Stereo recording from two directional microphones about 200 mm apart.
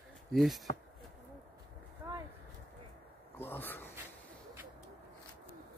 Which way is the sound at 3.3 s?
10° left (ahead or behind).